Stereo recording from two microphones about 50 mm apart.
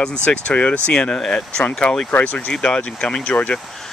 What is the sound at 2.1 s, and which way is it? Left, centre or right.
Speech, left.